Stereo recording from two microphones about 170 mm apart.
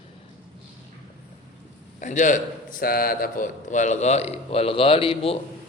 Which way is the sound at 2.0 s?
45° left (ahead or behind).